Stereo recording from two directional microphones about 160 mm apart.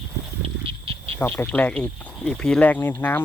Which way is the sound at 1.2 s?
10° left (ahead or behind).